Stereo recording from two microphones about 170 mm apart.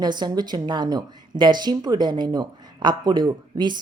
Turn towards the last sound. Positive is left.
turn(degrees=-25)  # may be behind; listen again after turning